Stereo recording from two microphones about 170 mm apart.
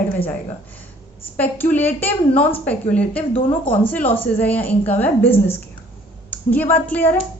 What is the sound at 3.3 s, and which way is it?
Speech, 30° left (ahead or behind).